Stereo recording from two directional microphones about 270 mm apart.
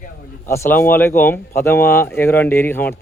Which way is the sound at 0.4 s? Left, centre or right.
Centre.